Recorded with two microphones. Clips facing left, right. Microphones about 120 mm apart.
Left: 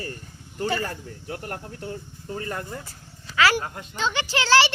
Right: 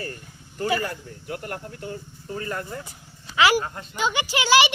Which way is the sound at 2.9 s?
20° right (ahead or behind).